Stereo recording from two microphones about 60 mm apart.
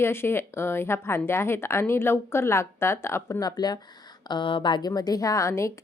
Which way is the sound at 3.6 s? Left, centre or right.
Left.